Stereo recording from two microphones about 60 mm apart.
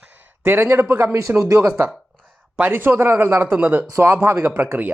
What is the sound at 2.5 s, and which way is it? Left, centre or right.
A man's voice, right.